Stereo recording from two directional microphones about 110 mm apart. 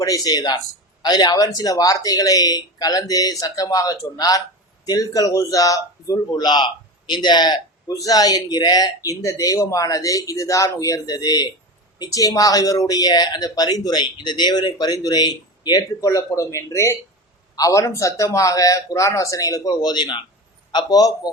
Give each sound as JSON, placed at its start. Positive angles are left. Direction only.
{"t": 0.0, "sound": "speech", "side_deg": 35}